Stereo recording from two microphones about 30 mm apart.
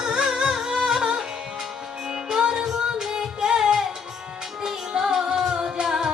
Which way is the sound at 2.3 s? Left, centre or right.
Right.